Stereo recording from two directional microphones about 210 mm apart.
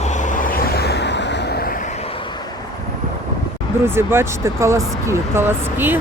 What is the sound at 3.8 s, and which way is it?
Speech, 10° right (ahead or behind).